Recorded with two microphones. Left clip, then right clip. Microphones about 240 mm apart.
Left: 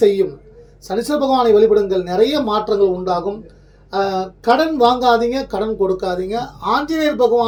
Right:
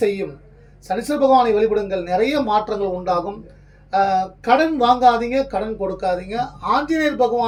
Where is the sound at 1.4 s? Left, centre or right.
Centre.